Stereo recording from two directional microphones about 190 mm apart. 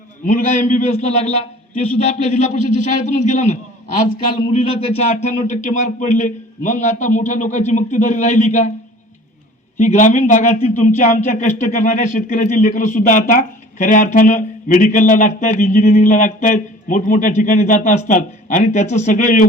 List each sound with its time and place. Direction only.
0.3 s a man's voice: 40° left (ahead or behind)
9.7 s a man's voice: 40° left (ahead or behind)